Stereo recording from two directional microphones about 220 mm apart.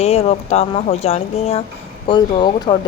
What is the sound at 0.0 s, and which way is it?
A woman's voice, 30° left (ahead or behind).